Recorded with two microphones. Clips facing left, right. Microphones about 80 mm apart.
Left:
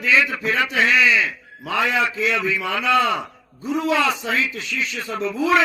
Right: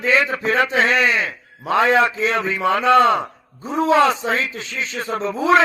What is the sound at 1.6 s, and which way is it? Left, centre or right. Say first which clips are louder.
A man's voice: right 5 dB; right.